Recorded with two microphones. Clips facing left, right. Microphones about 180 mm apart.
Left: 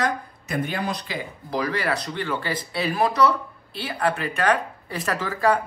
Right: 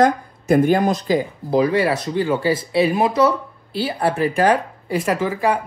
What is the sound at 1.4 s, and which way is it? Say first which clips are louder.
Speech: right 8 dB; 25° right (ahead or behind).